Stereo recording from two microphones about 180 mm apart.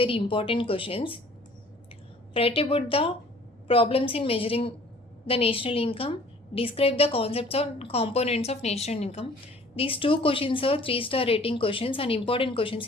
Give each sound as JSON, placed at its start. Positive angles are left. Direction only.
{"t": 0.0, "sound": "speech", "side_deg": 30}
{"t": 2.3, "sound": "a woman's voice", "side_deg": 30}